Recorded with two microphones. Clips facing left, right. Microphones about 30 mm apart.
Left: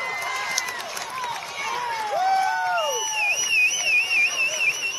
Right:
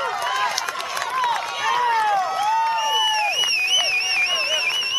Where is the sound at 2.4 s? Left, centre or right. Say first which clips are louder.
Right 2 dB; right.